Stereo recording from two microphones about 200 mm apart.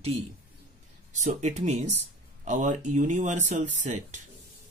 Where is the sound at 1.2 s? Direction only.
35° right (ahead or behind).